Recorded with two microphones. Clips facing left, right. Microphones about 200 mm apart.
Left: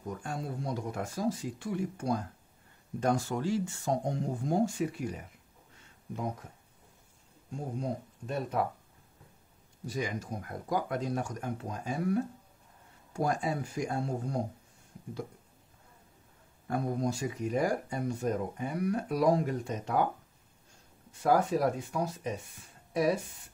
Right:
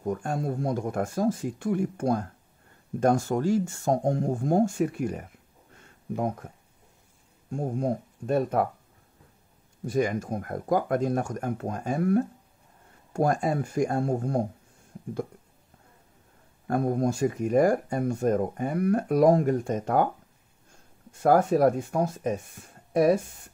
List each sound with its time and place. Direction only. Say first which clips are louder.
0.0 s speech: right 8 dB; 50° right (ahead or behind)
7.5 s speech: right 7 dB; 50° right (ahead or behind)
9.8 s speech: right 9 dB; 55° right (ahead or behind)
16.6 s speech: right 6 dB; 50° right (ahead or behind)
21.1 s speech: right 6 dB; 50° right (ahead or behind)